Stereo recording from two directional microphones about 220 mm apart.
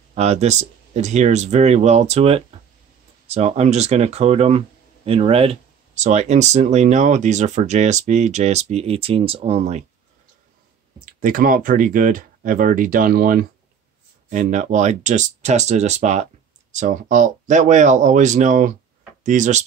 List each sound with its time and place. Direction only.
0.1 s speech: 30° right (ahead or behind)
11.1 s speech: 40° right (ahead or behind)